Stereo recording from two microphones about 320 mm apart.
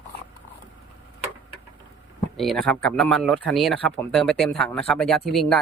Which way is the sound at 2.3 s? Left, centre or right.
Centre.